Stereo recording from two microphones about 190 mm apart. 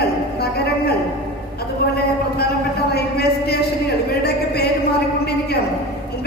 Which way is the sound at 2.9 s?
55° left (ahead or behind).